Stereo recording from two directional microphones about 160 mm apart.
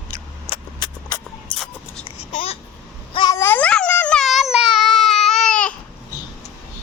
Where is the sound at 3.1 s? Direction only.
30° left (ahead or behind).